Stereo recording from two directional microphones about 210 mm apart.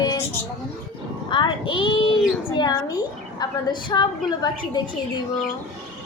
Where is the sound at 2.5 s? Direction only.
20° left (ahead or behind).